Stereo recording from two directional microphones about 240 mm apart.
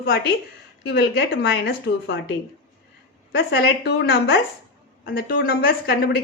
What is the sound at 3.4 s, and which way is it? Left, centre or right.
A woman's voice, left.